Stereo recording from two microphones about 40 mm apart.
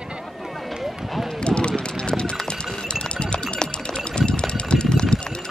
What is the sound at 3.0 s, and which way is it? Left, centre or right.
Music, left.